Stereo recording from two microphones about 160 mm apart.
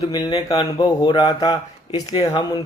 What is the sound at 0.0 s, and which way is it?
Speech, 25° left (ahead or behind).